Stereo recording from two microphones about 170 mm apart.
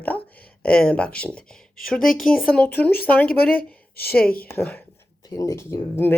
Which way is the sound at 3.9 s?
65° left (ahead or behind).